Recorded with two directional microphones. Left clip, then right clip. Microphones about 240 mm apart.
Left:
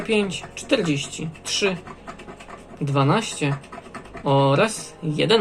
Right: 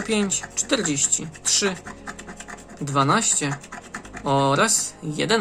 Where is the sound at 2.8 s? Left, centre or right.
Right.